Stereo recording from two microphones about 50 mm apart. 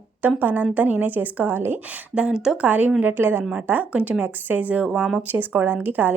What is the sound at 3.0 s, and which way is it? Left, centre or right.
A woman's voice, right.